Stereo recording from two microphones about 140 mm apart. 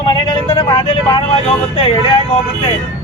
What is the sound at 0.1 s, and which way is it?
Vehicle, 40° left (ahead or behind).